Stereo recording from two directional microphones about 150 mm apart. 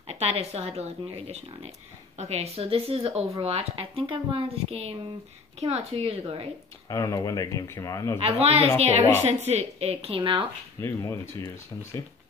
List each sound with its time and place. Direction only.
0.0 s a woman's voice: 45° right (ahead or behind)
6.9 s a man's voice: 25° left (ahead or behind)
8.2 s speech: 40° right (ahead or behind)
10.8 s a man's voice: 20° left (ahead or behind)